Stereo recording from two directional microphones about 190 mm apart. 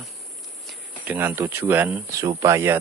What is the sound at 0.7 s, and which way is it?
Speech, 10° right (ahead or behind).